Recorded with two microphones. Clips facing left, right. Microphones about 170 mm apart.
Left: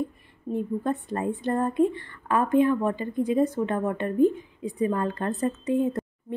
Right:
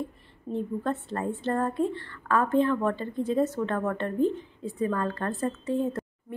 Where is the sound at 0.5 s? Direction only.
15° left (ahead or behind).